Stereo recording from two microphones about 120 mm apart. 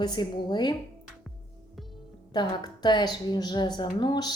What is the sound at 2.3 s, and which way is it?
A woman's voice, 40° left (ahead or behind).